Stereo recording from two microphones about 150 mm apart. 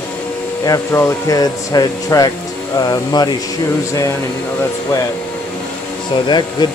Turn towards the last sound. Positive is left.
turn(degrees=30)  # may be behind; listen again after turning